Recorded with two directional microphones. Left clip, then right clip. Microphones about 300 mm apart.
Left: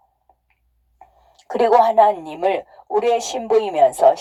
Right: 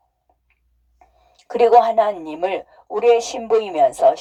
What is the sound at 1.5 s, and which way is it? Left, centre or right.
A woman's voice, left.